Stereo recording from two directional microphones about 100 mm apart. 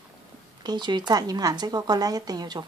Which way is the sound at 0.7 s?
50° right (ahead or behind).